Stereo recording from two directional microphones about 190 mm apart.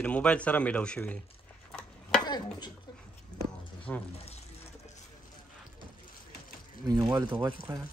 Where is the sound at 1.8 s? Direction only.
5° left (ahead or behind).